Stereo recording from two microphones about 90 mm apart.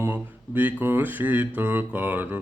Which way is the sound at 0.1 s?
20° right (ahead or behind).